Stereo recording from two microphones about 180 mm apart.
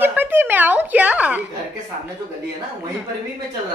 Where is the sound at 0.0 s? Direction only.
10° right (ahead or behind).